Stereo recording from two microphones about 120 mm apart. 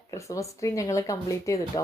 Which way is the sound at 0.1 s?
25° left (ahead or behind).